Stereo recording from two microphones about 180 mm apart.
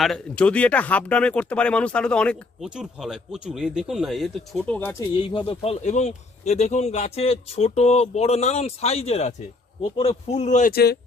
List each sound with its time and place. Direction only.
0.0 s speech: 5° left (ahead or behind)
5.1 s speech: 30° left (ahead or behind)
10.7 s speech: 60° left (ahead or behind)